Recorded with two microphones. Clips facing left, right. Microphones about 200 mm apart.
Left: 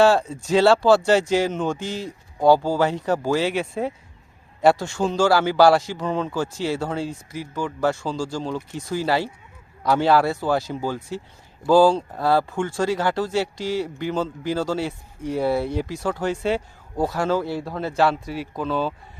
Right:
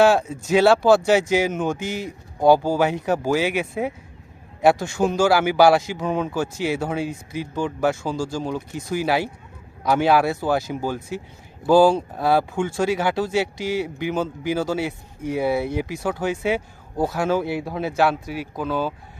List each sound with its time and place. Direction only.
0.0 s speech: 5° right (ahead or behind)
1.8 s speech: 20° right (ahead or behind); by 17.2 s centre (ahead or behind)
17.2 s speech: 20° right (ahead or behind)
17.7 s speech: 5° right (ahead or behind)